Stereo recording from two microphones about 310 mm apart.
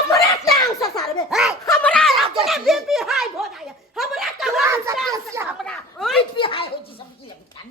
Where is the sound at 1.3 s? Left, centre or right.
Centre.